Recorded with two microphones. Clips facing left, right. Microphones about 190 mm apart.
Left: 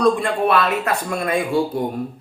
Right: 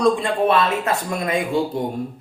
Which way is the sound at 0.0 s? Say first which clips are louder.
Even; 20° right (ahead or behind).